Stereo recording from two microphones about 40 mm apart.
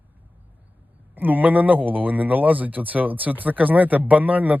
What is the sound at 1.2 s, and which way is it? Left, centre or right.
Speech, right.